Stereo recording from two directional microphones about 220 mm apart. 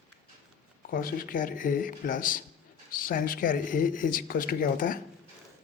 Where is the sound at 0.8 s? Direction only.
40° left (ahead or behind).